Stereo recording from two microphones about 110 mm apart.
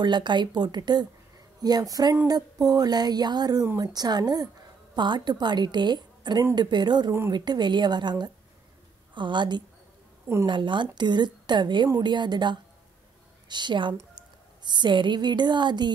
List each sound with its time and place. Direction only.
0.0 s a woman's voice: 45° right (ahead or behind)